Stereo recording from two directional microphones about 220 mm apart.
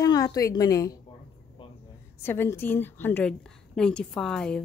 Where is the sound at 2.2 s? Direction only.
10° left (ahead or behind).